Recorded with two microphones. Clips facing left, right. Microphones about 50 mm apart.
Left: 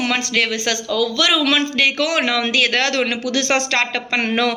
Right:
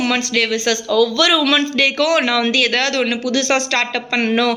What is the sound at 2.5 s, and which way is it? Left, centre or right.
A woman's voice, left.